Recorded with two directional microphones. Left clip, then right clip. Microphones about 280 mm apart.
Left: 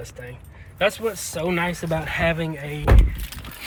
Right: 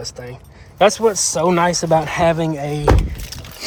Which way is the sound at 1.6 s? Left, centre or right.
Right.